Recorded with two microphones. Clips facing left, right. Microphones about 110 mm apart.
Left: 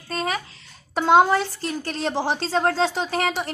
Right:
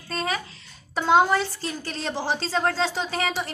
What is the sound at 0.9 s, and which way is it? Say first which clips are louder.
A child's voice: left 3 dB; 20° left (ahead or behind).